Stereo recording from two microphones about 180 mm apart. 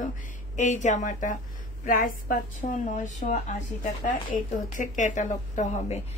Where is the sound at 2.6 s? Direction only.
40° left (ahead or behind).